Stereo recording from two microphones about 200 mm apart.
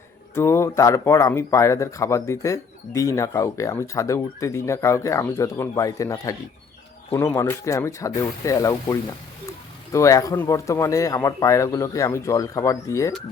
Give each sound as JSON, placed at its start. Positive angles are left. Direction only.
{"t": 0.3, "sound": "speech", "side_deg": 15}